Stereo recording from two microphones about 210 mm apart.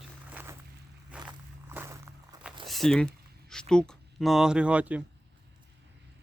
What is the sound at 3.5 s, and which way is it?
Speech, 5° left (ahead or behind).